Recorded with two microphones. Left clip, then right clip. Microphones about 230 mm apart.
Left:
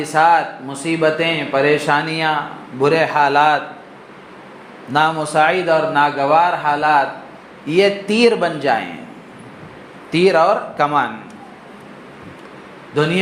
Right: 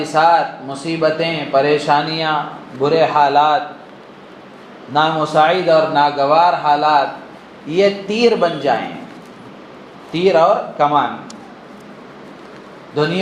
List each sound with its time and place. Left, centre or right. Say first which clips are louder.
0.0 s speech: right 1 dB; left
4.9 s speech: right 1 dB; left
10.1 s speech: right 1 dB; left